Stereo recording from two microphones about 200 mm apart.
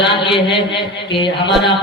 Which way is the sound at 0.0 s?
25° left (ahead or behind).